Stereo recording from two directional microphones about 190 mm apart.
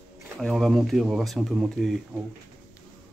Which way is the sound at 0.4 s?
Centre (ahead or behind).